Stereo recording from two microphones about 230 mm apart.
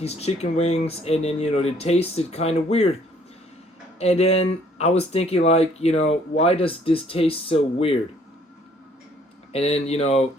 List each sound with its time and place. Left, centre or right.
0.0 s speech: left
4.0 s speech: left
9.5 s speech: left